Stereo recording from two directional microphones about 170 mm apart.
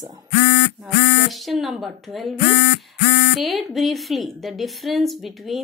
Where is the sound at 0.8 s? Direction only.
Centre (ahead or behind).